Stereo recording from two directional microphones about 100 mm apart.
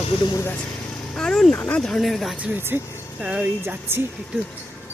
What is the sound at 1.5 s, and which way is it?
Speech, 15° left (ahead or behind).